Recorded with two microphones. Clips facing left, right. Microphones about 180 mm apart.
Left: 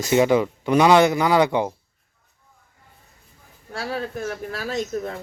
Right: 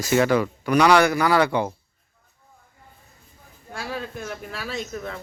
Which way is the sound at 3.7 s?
35° left (ahead or behind).